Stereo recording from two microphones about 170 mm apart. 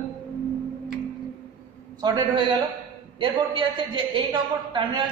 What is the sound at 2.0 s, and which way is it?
A man's voice, 25° right (ahead or behind).